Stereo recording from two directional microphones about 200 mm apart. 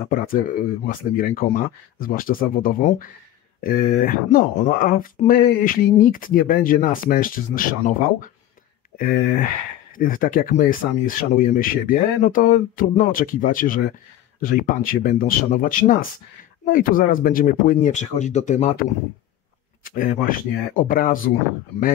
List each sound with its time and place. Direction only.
0.1 s speech: 45° left (ahead or behind)
20.2 s speech: 45° left (ahead or behind)